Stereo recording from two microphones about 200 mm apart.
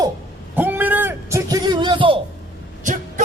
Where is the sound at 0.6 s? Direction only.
10° right (ahead or behind); by 2.2 s 25° right (ahead or behind).